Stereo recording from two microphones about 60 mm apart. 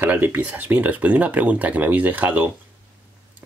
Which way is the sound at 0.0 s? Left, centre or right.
Right.